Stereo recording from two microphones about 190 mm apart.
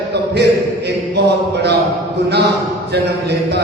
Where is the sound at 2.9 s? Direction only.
60° right (ahead or behind).